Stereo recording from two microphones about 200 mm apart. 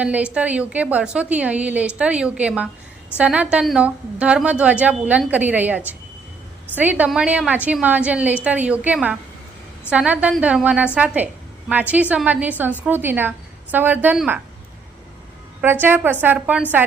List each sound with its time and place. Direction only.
0.0 s a woman's voice: 5° right (ahead or behind)
15.6 s a woman's voice: 10° right (ahead or behind)